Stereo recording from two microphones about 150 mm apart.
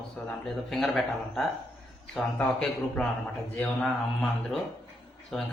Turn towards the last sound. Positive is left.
turn(degrees=0)  # may be behind; listen again after turning